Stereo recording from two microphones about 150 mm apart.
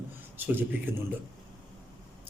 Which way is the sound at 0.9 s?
15° right (ahead or behind).